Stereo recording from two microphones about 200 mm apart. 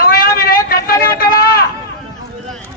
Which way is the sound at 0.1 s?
45° left (ahead or behind).